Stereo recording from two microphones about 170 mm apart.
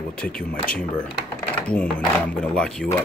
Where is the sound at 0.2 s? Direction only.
5° left (ahead or behind).